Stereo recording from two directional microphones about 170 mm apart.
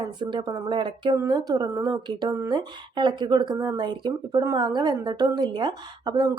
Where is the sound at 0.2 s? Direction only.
30° right (ahead or behind).